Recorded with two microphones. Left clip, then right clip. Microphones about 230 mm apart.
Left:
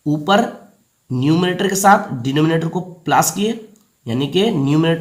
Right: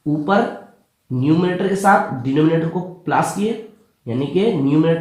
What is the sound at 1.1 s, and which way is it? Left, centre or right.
Speech, left.